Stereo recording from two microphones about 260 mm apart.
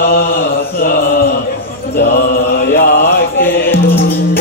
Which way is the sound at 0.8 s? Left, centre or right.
Left.